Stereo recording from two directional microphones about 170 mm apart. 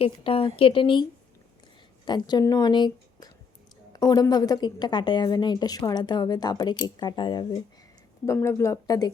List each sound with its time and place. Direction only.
0.0 s a woman's voice: 35° left (ahead or behind)
2.0 s a woman's voice: 25° left (ahead or behind)
8.3 s speech: 15° left (ahead or behind)